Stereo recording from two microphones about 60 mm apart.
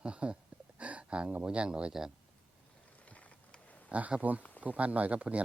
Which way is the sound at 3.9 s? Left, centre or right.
Right.